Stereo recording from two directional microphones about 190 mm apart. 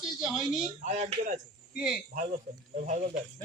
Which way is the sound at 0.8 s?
35° right (ahead or behind).